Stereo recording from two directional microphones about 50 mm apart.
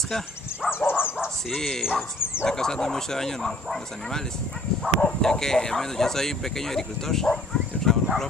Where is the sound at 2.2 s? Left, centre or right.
Left.